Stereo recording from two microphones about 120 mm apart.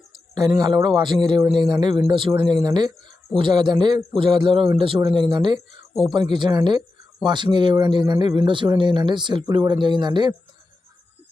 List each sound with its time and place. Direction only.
0.3 s speech: 35° right (ahead or behind)
5.5 s speech: centre (ahead or behind)
6.1 s speech: 40° right (ahead or behind)